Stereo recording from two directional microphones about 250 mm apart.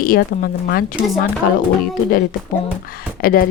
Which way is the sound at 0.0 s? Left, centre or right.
Left.